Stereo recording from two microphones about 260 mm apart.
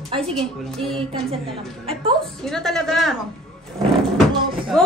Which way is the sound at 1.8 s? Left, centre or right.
Right.